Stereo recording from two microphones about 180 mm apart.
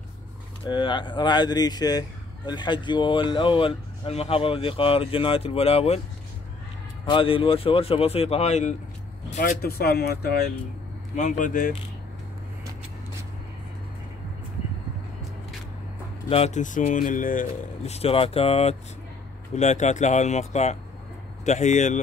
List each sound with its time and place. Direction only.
0.7 s speech: 25° left (ahead or behind)
7.1 s speech: 30° left (ahead or behind)
9.4 s speech: 55° left (ahead or behind)
11.1 s speech: 45° left (ahead or behind)
16.3 s speech: 35° left (ahead or behind)